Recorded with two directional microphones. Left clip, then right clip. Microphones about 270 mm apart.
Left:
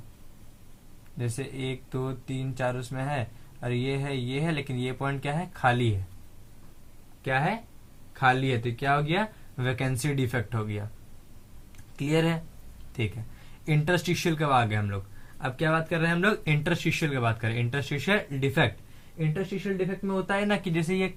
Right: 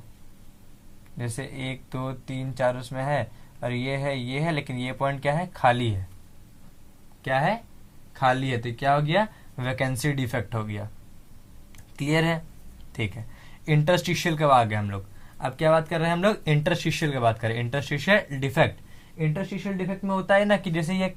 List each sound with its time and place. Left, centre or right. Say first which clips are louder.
1.2 s speech: even; right
7.3 s speech: right 3 dB; right
11.9 s speech: right 2 dB; right
13.7 s speech: right 4 dB; right